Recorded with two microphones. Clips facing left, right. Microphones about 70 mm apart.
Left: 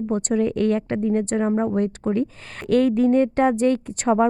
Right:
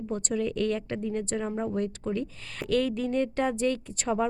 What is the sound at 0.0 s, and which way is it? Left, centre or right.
Speech, left.